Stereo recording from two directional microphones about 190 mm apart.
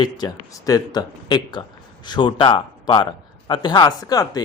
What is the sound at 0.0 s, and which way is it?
Speech, 20° left (ahead or behind).